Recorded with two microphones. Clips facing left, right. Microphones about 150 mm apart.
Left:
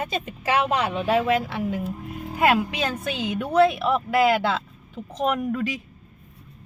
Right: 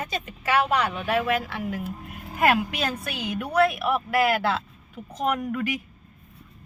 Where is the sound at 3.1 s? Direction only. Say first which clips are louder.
Left 4 dB; 20° left (ahead or behind).